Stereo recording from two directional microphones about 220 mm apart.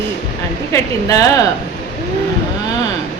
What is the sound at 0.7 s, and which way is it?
Speech, 15° left (ahead or behind).